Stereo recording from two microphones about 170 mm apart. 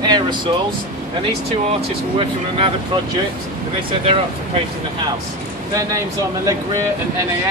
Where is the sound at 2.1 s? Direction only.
30° right (ahead or behind).